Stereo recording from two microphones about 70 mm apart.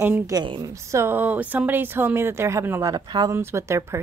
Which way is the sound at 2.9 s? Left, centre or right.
Right.